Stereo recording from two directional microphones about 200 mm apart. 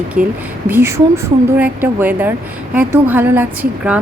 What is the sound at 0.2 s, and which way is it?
Speech, 45° right (ahead or behind).